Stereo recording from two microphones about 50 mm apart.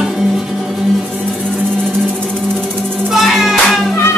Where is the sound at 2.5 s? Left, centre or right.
Right.